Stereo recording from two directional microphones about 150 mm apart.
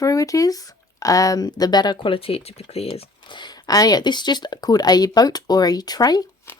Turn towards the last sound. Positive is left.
turn(degrees=20)  # may be behind; listen again after turning